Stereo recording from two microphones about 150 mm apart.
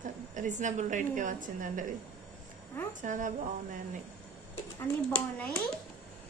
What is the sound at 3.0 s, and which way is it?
Speech, 60° right (ahead or behind).